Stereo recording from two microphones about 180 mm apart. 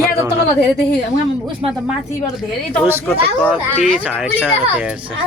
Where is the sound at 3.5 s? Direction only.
5° right (ahead or behind).